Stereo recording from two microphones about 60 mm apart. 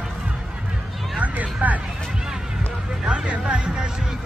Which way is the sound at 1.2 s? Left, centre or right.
Right.